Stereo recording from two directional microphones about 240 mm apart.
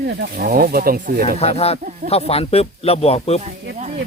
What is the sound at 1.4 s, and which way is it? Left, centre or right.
Speech, left.